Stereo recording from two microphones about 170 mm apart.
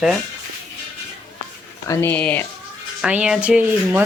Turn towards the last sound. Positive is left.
turn(degrees=-10)  # may be behind; listen again after turning